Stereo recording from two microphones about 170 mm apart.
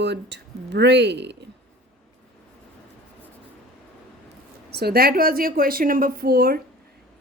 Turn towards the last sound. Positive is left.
turn(degrees=-60)  # may be behind; listen again after turning